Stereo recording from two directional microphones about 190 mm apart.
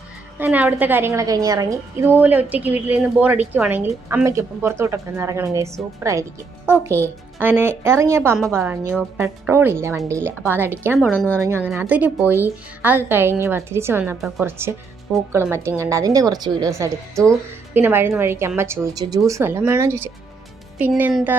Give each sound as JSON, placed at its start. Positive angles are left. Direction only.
{"t": 0.3, "sound": "a woman's voice", "side_deg": -10}
{"t": 14.2, "sound": "a woman's voice", "side_deg": 0}
{"t": 15.3, "sound": "a woman's voice", "side_deg": -15}